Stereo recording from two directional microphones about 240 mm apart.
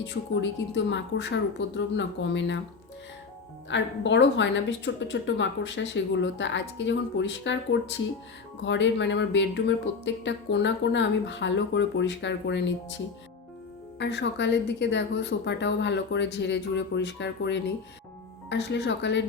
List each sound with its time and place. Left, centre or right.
0.7 s speech: left
3.7 s speech: left
14.0 s speech: left